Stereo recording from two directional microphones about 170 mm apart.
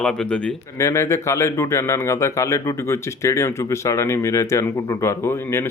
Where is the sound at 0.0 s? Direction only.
5° left (ahead or behind).